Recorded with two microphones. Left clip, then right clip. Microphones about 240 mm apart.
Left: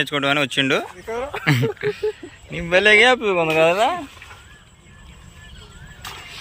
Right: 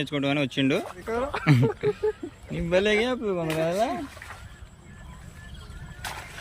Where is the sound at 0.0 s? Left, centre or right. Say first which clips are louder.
Left 7 dB; centre.